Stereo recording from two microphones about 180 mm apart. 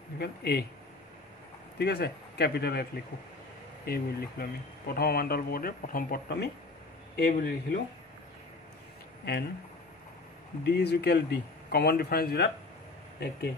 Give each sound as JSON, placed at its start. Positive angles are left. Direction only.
{"t": 0.2, "sound": "speech", "side_deg": 65}
{"t": 1.8, "sound": "speech", "side_deg": 65}
{"t": 9.3, "sound": "speech", "side_deg": 65}
{"t": 10.6, "sound": "speech", "side_deg": 65}